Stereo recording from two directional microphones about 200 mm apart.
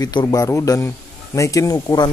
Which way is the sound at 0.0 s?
20° left (ahead or behind).